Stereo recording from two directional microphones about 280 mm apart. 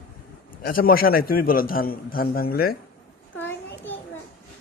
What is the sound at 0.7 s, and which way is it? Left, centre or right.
A man's voice, left.